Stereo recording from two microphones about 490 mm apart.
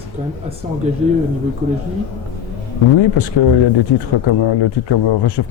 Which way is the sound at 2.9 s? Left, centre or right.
Left.